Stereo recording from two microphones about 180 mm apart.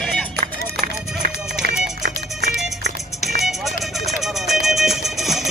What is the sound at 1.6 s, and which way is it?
Run, 65° right (ahead or behind).